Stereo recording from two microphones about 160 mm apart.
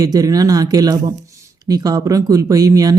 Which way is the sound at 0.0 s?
20° right (ahead or behind).